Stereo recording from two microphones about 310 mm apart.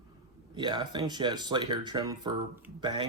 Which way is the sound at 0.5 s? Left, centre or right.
Centre.